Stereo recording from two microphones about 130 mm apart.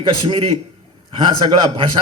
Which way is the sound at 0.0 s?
45° right (ahead or behind).